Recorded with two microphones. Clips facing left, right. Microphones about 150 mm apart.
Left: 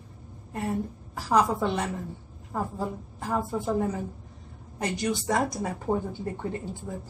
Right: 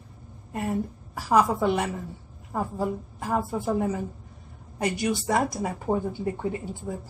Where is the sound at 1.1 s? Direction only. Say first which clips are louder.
Right 2 dB; 5° right (ahead or behind).